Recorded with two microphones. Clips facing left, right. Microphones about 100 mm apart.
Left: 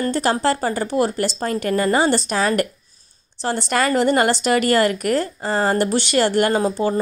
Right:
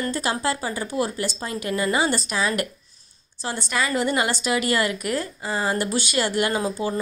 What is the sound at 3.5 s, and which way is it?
Speech, 90° left.